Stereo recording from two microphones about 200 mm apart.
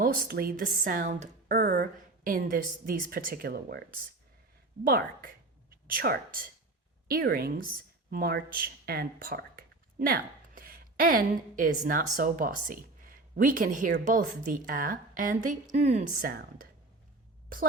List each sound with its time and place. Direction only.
0.0 s a woman's voice: 50° right (ahead or behind)